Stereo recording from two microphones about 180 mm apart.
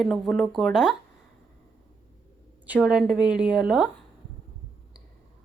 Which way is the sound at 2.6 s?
5° right (ahead or behind).